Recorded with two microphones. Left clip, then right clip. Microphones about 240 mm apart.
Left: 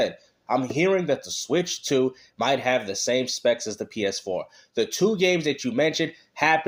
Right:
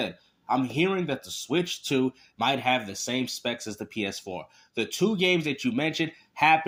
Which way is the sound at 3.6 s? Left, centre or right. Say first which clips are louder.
Left 5 dB; right.